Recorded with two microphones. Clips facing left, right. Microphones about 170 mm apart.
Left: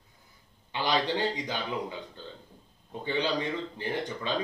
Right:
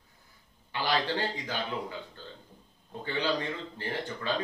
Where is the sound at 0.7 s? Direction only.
20° left (ahead or behind).